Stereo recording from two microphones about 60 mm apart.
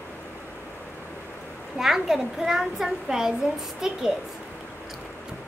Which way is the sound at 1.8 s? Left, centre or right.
Centre.